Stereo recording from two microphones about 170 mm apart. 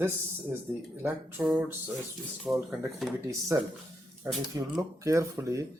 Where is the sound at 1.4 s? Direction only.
10° right (ahead or behind).